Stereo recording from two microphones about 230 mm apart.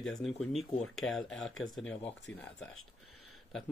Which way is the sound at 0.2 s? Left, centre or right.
Centre.